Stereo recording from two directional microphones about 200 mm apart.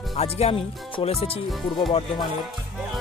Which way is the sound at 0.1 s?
30° left (ahead or behind).